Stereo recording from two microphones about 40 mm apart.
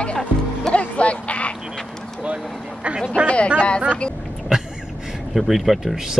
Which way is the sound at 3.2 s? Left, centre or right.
Left.